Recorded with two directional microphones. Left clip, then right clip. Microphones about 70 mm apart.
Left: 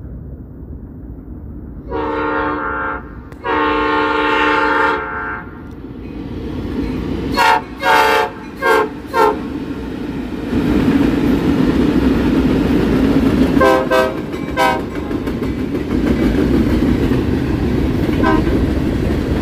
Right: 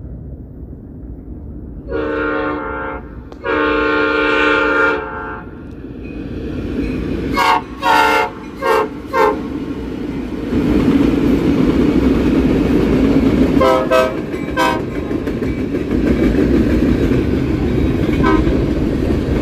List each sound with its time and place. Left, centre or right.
1.9 s train: centre
6.0 s vehicle: right
7.3 s train: right
9.3 s train: right
13.6 s toot: centre
14.1 s toot: right
14.9 s vehicle: right